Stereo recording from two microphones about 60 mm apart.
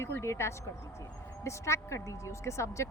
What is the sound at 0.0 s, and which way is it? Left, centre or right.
Speech, left.